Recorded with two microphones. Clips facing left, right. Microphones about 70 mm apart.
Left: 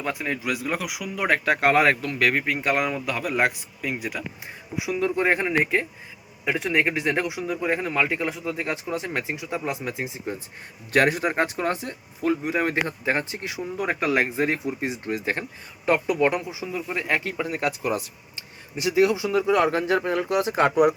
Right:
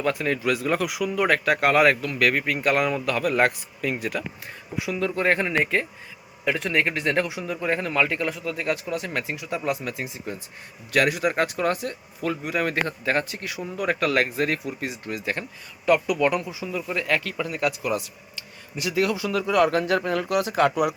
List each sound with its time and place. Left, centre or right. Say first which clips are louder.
0.0 s speech: right 4 dB; centre